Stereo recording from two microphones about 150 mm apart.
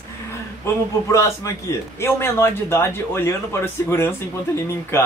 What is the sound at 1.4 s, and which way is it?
A man's voice, 25° left (ahead or behind).